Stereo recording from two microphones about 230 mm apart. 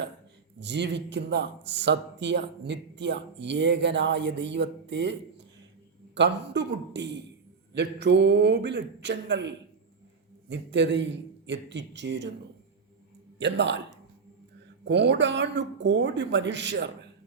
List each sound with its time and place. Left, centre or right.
0.6 s speech: right
13.4 s speech: right
14.8 s speech: right